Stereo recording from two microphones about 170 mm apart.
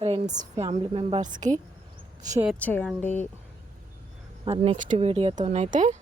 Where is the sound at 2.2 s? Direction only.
20° right (ahead or behind).